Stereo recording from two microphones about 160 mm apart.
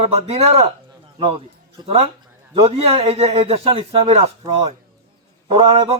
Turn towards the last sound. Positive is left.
turn(degrees=-40)  # may be behind; listen again after turning